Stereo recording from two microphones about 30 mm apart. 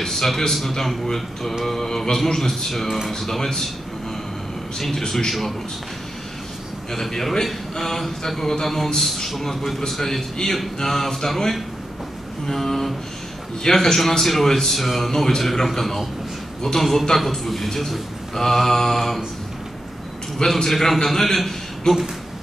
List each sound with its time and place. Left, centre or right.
0.0 s speech: centre
1.7 s speech: centre
2.7 s speech: centre
4.8 s speech: centre
6.9 s speech: centre
14.8 s speech: centre
15.0 s speech: centre
20.3 s speech: centre